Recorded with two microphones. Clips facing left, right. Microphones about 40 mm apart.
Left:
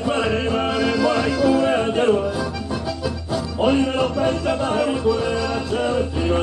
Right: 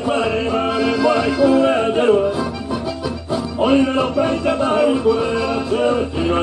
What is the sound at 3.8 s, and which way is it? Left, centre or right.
Music, centre.